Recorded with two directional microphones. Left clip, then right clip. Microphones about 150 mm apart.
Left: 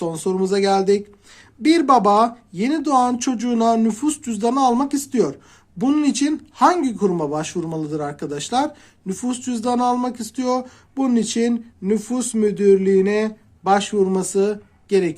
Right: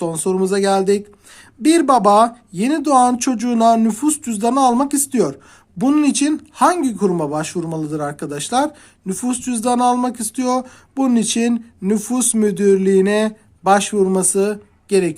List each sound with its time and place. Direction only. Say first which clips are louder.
0.0 s speech: right 3 dB; 30° right (ahead or behind)